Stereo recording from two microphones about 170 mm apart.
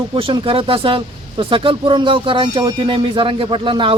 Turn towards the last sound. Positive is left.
turn(degrees=-30)  # may be behind; listen again after turning